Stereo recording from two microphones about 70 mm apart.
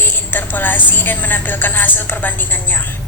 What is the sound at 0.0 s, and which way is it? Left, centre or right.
A woman's voice, left.